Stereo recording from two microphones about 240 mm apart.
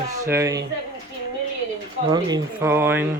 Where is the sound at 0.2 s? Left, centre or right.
Centre.